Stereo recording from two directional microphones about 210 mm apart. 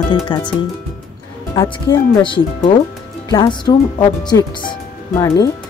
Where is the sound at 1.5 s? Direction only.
10° left (ahead or behind).